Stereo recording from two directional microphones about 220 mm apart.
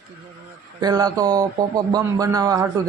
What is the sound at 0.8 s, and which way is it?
A man's voice, 15° right (ahead or behind).